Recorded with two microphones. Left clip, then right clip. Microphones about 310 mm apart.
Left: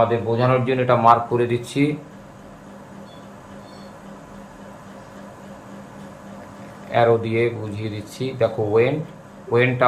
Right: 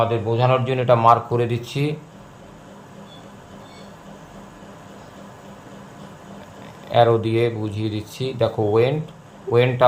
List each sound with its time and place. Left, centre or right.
0.0 s speech: right
6.9 s speech: right